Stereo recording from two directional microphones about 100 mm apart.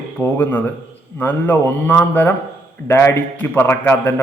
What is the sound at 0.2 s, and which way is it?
A man's voice, 20° left (ahead or behind).